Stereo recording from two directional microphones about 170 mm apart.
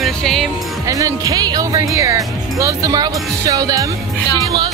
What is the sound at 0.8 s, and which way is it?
Speech, 20° right (ahead or behind).